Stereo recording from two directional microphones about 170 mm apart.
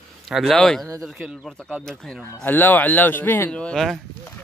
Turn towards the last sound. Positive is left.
turn(degrees=5)  # may be behind; listen again after turning